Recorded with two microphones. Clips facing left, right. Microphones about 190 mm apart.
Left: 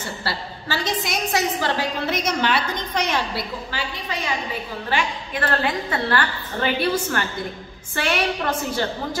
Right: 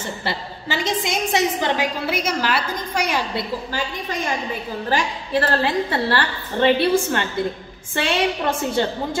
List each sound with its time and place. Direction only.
0.0 s a woman's voice: 20° right (ahead or behind)
2.0 s a woman's voice: 5° right (ahead or behind)
3.7 s a woman's voice: 45° right (ahead or behind); by 9.2 s 25° right (ahead or behind)